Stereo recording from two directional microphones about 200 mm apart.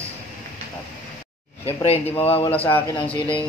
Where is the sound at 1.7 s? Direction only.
30° left (ahead or behind).